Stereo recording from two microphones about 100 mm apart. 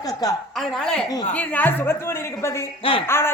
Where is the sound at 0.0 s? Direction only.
40° left (ahead or behind).